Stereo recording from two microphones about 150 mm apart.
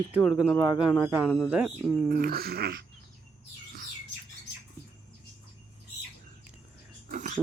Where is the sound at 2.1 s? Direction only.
85° right.